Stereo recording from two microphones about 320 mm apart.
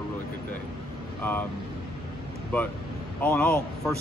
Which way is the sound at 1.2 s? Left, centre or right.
Centre.